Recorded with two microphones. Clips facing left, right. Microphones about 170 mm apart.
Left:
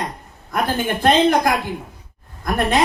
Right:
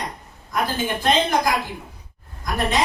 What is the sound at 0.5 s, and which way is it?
Speech, 55° left (ahead or behind).